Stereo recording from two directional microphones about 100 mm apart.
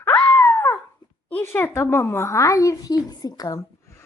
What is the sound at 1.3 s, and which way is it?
A woman's voice, 20° left (ahead or behind).